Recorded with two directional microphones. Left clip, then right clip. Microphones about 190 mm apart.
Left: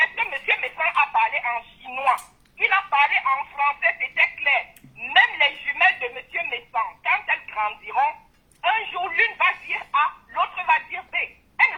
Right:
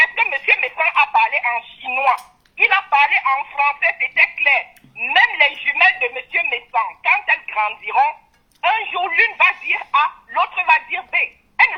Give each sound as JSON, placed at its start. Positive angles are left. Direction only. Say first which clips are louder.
{"t": 0.0, "sound": "telephone", "louder": "right 6 dB", "side_deg": -35}